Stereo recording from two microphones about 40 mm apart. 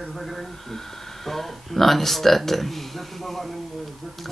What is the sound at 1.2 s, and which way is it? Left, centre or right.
Speech, centre.